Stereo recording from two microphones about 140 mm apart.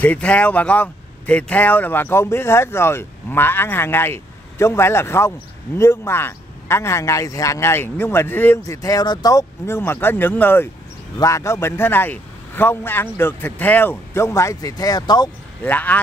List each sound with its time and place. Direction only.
0.0 s a man's voice: 10° left (ahead or behind); by 15.2 s 30° left (ahead or behind)
15.6 s speech: 10° left (ahead or behind)